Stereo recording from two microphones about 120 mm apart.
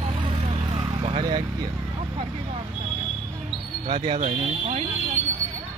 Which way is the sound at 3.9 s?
50° right (ahead or behind).